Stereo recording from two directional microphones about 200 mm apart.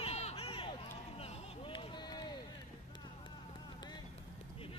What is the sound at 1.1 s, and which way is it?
Run, 25° left (ahead or behind).